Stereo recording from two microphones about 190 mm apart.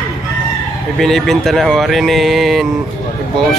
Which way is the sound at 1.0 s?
Centre (ahead or behind).